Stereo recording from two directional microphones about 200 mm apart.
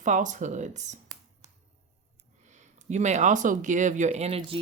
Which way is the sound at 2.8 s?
35° right (ahead or behind).